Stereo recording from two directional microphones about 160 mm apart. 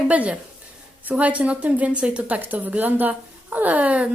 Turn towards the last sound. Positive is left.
turn(degrees=-10)  # may be behind; listen again after turning